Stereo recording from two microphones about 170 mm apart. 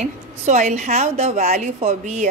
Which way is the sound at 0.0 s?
45° right (ahead or behind).